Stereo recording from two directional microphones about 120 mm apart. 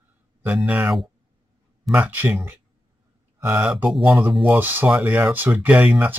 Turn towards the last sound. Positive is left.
turn(degrees=-10)  # may be behind; listen again after turning